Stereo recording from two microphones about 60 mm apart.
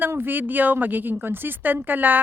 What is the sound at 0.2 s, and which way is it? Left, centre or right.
Speech, right.